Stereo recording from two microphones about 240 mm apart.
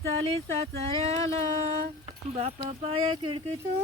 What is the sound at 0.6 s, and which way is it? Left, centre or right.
Speech, right.